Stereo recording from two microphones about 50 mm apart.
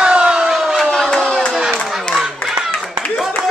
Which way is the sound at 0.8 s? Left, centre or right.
Centre.